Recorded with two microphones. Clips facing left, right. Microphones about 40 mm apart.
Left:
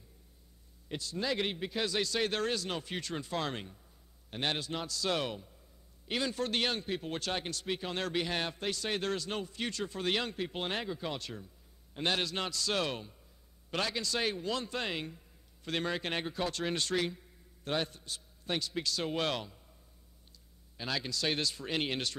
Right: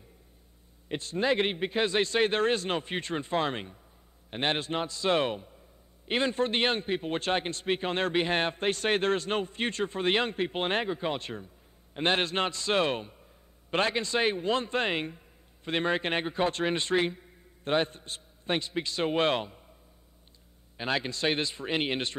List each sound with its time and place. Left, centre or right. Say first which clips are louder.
0.8 s a man's voice: right 7 dB; right
20.7 s a man's voice: right 6 dB; right